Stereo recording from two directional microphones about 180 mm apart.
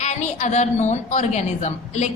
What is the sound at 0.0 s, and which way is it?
A woman's voice, 40° left (ahead or behind).